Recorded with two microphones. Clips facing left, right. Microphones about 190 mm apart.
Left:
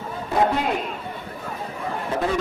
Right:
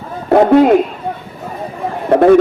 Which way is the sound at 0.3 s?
65° right (ahead or behind).